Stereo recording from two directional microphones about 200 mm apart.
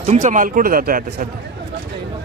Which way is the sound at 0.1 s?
40° right (ahead or behind).